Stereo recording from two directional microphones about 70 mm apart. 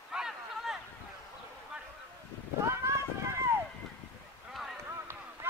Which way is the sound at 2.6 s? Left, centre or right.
Right.